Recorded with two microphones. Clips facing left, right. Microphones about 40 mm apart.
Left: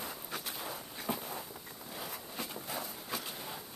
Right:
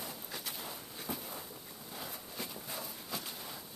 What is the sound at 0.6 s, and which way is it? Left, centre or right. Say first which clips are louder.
Walk: left 3 dB; left.